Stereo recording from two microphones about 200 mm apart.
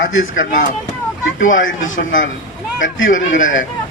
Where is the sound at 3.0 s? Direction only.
70° left (ahead or behind).